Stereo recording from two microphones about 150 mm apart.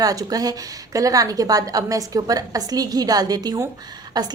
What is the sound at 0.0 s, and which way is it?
A woman's voice, 25° right (ahead or behind).